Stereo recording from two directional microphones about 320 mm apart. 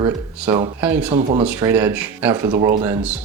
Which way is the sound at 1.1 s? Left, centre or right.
Centre.